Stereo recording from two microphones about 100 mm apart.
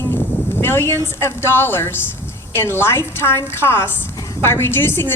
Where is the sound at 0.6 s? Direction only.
25° left (ahead or behind).